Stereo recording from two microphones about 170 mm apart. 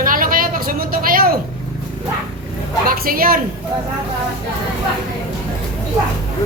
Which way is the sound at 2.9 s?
55° right (ahead or behind).